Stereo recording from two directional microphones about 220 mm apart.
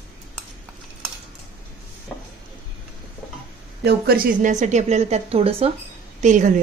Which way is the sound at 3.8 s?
45° right (ahead or behind).